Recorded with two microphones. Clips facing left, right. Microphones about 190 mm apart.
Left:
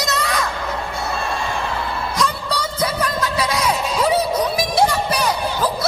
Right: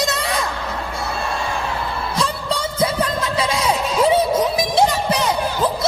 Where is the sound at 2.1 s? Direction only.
25° right (ahead or behind).